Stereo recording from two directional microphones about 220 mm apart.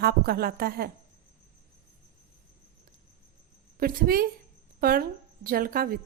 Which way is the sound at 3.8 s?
40° right (ahead or behind).